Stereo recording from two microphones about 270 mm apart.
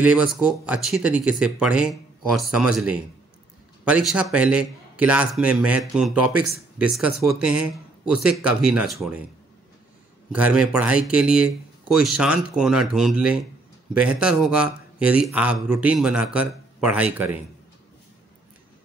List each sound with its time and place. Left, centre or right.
0.0 s a man's voice: centre
10.3 s a man's voice: centre